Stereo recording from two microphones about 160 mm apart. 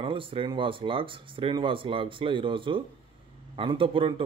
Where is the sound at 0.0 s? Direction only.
35° right (ahead or behind).